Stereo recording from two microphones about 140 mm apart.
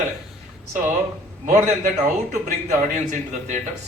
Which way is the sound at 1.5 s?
65° right (ahead or behind).